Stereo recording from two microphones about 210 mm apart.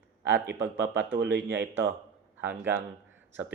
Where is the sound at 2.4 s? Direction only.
10° right (ahead or behind).